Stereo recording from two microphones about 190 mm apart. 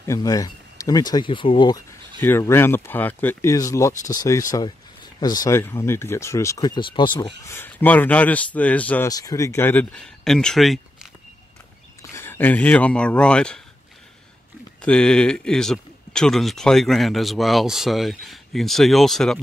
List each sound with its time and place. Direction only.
0.0 s speech: 15° left (ahead or behind)
2.1 s a man's voice: 10° left (ahead or behind)
12.0 s speech: 15° left (ahead or behind)
14.8 s a man's voice: 5° left (ahead or behind)